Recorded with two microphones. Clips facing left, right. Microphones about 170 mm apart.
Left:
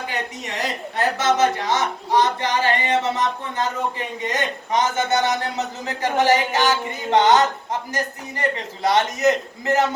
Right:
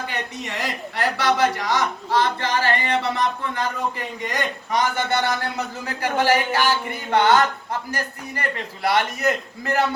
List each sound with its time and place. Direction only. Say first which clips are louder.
0.1 s speech: left 1 dB; 20° left (ahead or behind)